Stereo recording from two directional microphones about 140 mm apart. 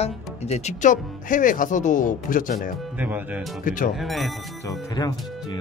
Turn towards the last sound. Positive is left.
turn(degrees=30)  # may be behind; listen again after turning